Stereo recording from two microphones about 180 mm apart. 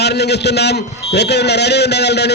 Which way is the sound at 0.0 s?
65° left (ahead or behind).